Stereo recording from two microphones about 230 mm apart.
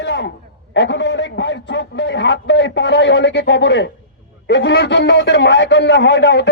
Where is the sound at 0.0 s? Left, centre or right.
Left.